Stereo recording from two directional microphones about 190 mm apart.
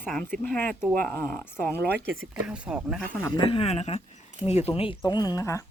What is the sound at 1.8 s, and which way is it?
Speech, 55° right (ahead or behind).